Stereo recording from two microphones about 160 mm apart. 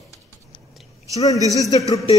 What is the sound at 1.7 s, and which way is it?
Speech, 20° left (ahead or behind).